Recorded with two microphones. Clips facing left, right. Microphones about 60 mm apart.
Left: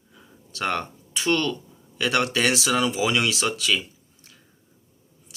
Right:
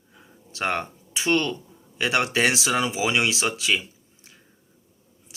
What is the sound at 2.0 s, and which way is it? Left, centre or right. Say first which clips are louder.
Speech: even; right.